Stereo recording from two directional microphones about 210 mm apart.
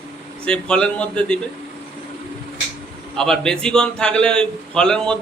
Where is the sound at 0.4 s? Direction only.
5° left (ahead or behind).